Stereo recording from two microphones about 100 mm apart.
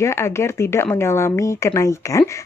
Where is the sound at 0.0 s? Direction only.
25° left (ahead or behind).